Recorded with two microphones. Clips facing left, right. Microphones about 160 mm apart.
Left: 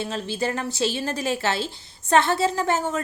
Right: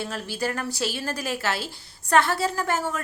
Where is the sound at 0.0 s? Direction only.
20° left (ahead or behind).